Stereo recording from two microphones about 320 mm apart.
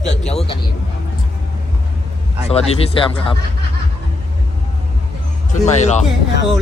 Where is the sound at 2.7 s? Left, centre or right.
Centre.